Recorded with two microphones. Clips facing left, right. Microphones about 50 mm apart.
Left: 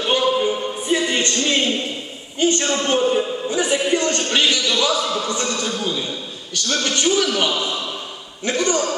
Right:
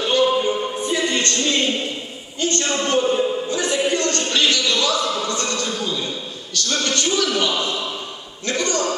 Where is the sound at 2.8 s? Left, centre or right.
Centre.